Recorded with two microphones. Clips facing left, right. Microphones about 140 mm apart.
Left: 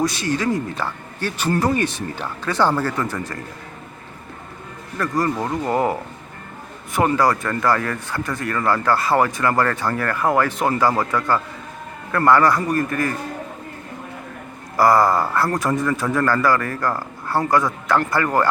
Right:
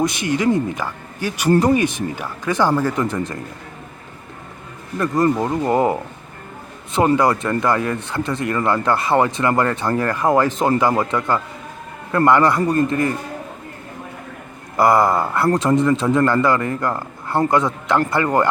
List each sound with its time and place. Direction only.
0.0 s speech: 20° right (ahead or behind)
4.9 s speech: 20° right (ahead or behind)
7.2 s speech: 20° right (ahead or behind)
14.8 s speech: 20° right (ahead or behind)